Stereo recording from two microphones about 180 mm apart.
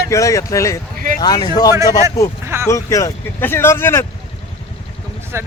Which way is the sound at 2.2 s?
20° left (ahead or behind).